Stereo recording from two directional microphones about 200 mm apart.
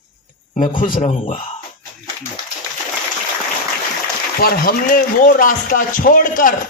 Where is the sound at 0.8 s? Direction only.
40° left (ahead or behind).